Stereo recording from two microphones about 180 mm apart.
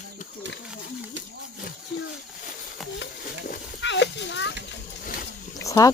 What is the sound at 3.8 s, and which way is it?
Horse, 80° left.